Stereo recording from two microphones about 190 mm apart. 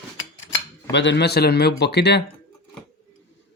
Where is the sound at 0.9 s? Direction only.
65° left (ahead or behind).